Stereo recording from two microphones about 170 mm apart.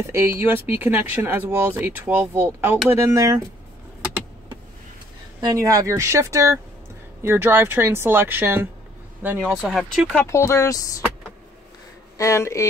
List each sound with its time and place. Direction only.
0.0 s speech: 15° right (ahead or behind)
5.4 s speech: 20° right (ahead or behind); by 10.2 s centre (ahead or behind)
10.2 s speech: 15° left (ahead or behind)
12.2 s speech: 15° left (ahead or behind)